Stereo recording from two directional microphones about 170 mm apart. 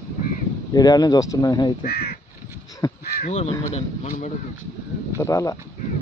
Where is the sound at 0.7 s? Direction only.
25° left (ahead or behind).